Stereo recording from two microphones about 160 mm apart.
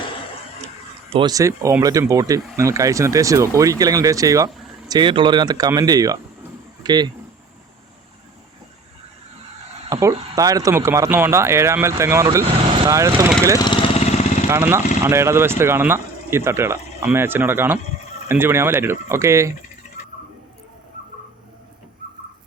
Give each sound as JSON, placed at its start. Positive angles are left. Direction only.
{"t": 1.1, "sound": "speech", "side_deg": -25}
{"t": 9.9, "sound": "speech", "side_deg": -20}
{"t": 13.6, "sound": "lawn mower", "side_deg": 30}
{"t": 14.4, "sound": "speech", "side_deg": -15}